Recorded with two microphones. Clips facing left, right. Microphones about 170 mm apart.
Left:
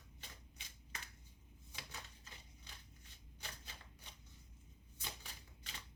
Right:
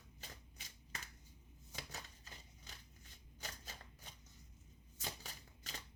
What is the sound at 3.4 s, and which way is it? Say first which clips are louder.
Shuffling cards: right 2 dB; 45° right (ahead or behind).